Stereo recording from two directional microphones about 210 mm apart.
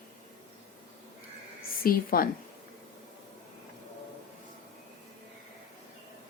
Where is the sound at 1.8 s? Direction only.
45° left (ahead or behind).